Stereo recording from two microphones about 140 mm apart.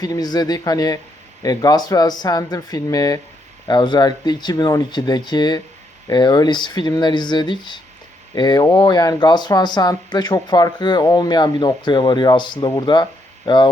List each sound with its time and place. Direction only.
0.0 s speech: 25° left (ahead or behind)